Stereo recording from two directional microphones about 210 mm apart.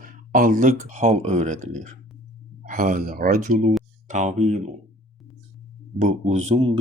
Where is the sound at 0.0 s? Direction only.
40° right (ahead or behind).